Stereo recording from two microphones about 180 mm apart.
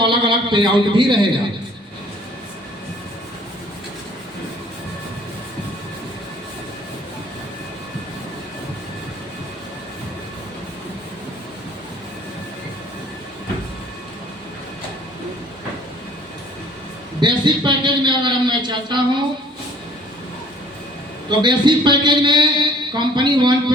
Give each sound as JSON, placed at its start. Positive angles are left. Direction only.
{"t": 0.0, "sound": "a man's voice", "side_deg": -25}
{"t": 17.2, "sound": "a sound", "side_deg": -25}
{"t": 21.2, "sound": "a man's voice", "side_deg": -25}